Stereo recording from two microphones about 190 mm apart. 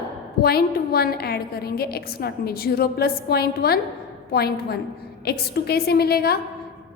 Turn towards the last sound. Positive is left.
turn(degrees=55)  # may be behind; listen again after turning